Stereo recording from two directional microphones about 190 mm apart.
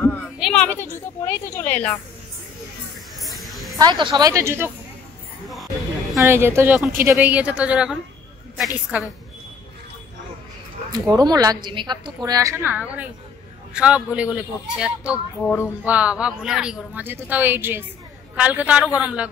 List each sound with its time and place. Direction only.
0.4 s a woman's voice: 5° left (ahead or behind)
3.2 s a sound: centre (ahead or behind)
3.7 s a woman's voice: 20° right (ahead or behind)
6.2 s speech: 15° right (ahead or behind)
10.9 s a woman's voice: 20° right (ahead or behind)
15.4 s a woman's voice: 10° left (ahead or behind)
15.8 s speech: 5° right (ahead or behind)